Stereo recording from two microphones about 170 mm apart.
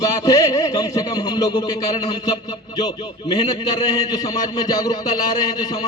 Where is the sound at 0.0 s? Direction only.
20° left (ahead or behind).